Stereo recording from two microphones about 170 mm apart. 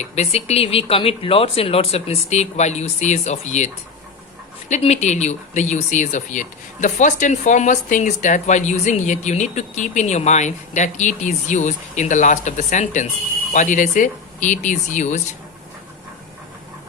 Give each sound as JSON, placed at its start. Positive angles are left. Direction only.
{"t": 0.0, "sound": "speech", "side_deg": 40}
{"t": 4.7, "sound": "speech", "side_deg": 40}